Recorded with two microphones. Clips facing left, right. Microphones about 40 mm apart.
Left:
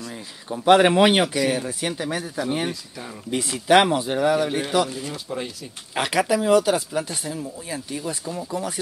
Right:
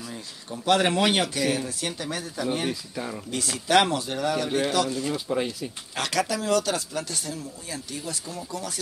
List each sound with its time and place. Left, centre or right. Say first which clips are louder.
0.1 s speech: left 4 dB; centre
2.7 s speech: right 3 dB; centre
3.3 s speech: left 8 dB; left
5.3 s speech: right 3 dB; right
5.9 s speech: left 5 dB; centre